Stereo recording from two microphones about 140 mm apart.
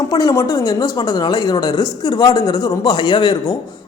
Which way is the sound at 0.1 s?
25° left (ahead or behind).